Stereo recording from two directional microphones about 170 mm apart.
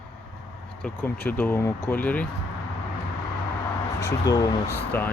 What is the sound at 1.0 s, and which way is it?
Speech, 10° left (ahead or behind).